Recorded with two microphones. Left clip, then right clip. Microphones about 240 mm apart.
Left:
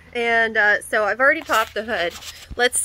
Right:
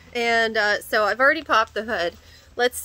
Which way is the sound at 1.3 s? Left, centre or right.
Centre.